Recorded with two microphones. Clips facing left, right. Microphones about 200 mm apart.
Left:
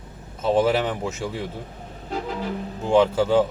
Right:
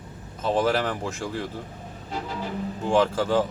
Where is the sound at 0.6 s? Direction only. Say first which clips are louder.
Left 2 dB; 5° left (ahead or behind).